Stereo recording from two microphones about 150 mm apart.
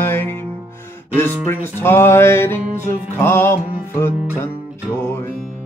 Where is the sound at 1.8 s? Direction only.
15° left (ahead or behind).